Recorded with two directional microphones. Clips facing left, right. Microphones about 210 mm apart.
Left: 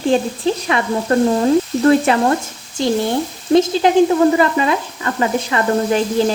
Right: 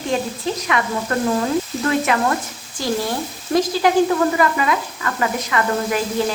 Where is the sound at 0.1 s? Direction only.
30° left (ahead or behind).